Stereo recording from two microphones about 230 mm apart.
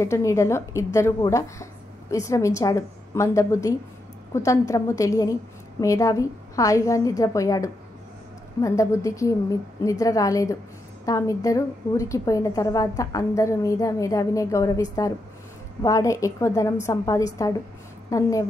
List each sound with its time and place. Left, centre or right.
0.0 s speech: centre